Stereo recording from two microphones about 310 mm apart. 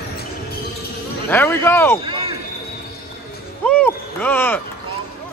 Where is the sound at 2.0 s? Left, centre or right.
Centre.